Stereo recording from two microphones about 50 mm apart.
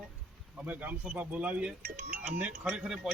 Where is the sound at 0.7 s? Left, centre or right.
Right.